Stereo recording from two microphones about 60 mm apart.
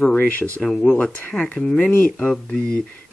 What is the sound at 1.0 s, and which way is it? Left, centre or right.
Speech, centre.